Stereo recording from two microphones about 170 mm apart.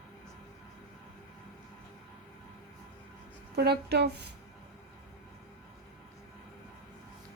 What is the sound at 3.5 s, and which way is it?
Speech, 70° right (ahead or behind).